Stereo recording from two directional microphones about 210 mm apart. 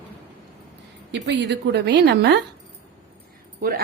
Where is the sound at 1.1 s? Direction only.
55° right (ahead or behind).